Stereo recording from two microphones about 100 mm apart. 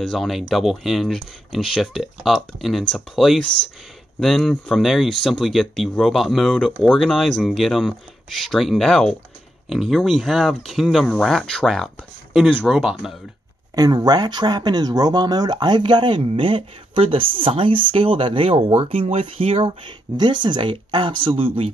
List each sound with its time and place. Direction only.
0.0 s speech: centre (ahead or behind)
13.7 s speech: 45° right (ahead or behind); by 21.6 s 65° right (ahead or behind)